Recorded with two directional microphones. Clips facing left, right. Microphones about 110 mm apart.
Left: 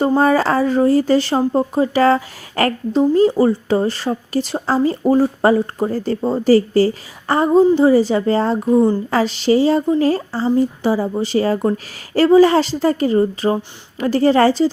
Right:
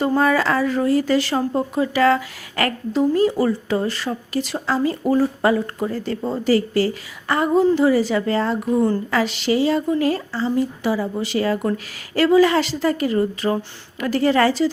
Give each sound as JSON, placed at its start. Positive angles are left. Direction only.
{"t": 0.0, "sound": "speech", "side_deg": 30}
{"t": 8.7, "sound": "speech", "side_deg": 20}
{"t": 9.0, "sound": "speech", "side_deg": 35}